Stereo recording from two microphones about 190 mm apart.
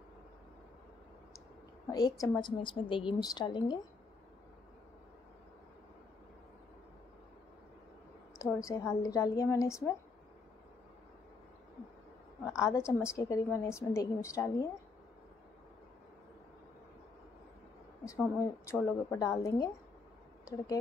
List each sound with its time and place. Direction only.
1.9 s a woman's voice: 20° left (ahead or behind)
8.6 s a woman's voice: 15° left (ahead or behind)
12.5 s a woman's voice: 15° left (ahead or behind)
18.0 s a woman's voice: 15° left (ahead or behind)